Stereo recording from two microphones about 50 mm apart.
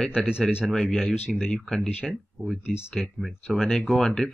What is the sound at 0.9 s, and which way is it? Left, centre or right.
Speech, centre.